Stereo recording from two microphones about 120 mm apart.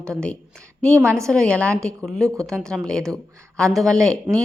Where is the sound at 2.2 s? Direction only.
30° right (ahead or behind).